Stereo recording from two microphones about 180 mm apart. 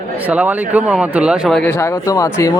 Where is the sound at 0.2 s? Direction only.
10° right (ahead or behind).